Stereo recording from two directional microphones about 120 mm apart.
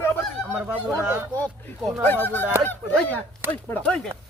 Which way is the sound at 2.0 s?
15° left (ahead or behind).